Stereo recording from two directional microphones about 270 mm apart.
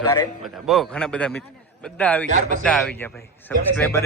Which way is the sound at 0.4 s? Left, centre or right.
Centre.